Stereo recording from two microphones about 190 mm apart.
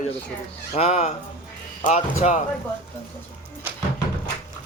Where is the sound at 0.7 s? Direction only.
35° left (ahead or behind).